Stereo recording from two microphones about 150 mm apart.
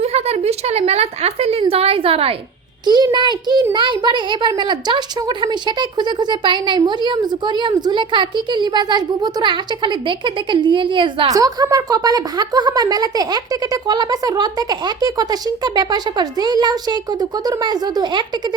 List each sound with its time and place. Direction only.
0.0 s a woman's voice: 45° right (ahead or behind)
2.8 s a child's voice: 30° right (ahead or behind)